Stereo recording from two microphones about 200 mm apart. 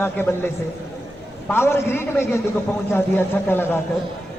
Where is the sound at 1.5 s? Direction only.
10° left (ahead or behind).